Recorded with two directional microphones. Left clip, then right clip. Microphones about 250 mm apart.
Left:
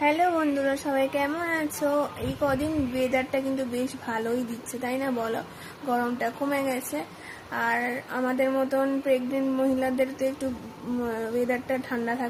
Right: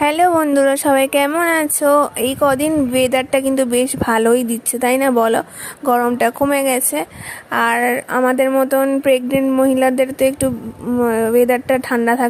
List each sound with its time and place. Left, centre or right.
0.0 s a woman's voice: right